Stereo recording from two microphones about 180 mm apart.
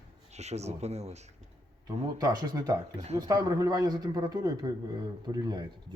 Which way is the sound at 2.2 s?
20° right (ahead or behind).